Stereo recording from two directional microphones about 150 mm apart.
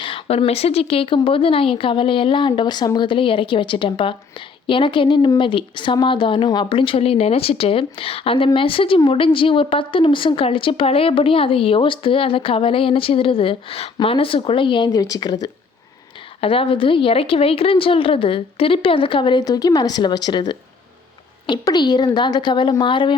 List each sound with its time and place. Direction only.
0.0 s speech: 40° left (ahead or behind)
16.4 s speech: 40° left (ahead or behind)
21.4 s a woman's voice: 30° left (ahead or behind)